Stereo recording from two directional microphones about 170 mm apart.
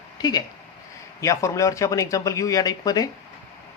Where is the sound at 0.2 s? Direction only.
25° left (ahead or behind).